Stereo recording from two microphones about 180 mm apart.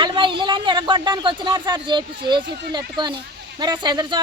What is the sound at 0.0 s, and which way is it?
Speech, 25° right (ahead or behind).